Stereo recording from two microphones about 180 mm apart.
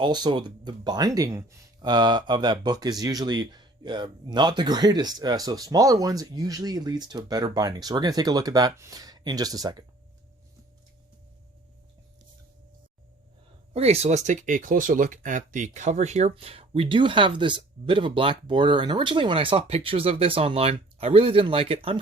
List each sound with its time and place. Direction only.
0.0 s speech: 25° right (ahead or behind)
13.7 s speech: 35° right (ahead or behind)